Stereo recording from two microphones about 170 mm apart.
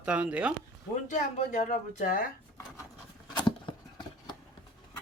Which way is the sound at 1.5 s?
45° left (ahead or behind).